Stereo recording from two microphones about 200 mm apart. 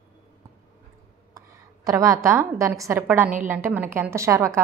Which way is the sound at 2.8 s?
10° right (ahead or behind).